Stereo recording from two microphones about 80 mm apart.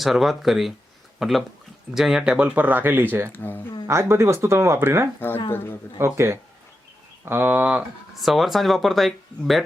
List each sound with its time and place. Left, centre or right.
0.0 s speech: centre; by 3.2 s right
3.3 s speech: left
3.8 s speech: right
5.5 s speech: left
6.1 s speech: right; by 7.9 s centre
8.2 s speech: centre